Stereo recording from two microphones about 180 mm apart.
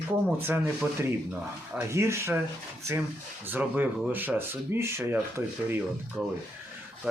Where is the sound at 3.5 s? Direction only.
10° right (ahead or behind).